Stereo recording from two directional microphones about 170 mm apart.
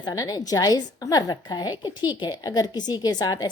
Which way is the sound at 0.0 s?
20° left (ahead or behind).